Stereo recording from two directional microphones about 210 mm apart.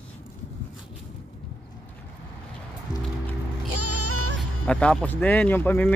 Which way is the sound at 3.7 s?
90° right.